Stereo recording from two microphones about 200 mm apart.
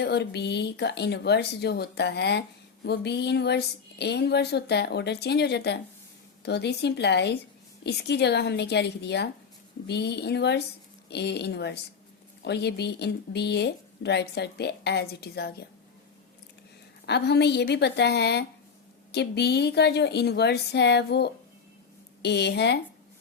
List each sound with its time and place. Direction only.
0.0 s speech: 55° left (ahead or behind)
17.1 s speech: 55° left (ahead or behind)